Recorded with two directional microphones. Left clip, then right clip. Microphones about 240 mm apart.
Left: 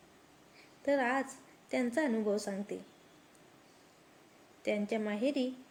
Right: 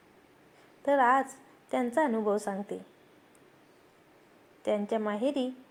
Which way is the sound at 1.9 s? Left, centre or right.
Centre.